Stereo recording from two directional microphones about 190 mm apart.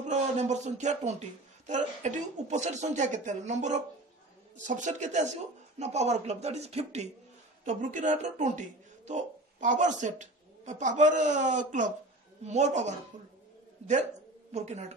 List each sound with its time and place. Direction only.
0.0 s a man's voice: 40° right (ahead or behind)
14.5 s a man's voice: 35° right (ahead or behind)